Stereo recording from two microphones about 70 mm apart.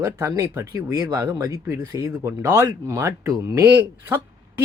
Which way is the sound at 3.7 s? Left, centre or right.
Right.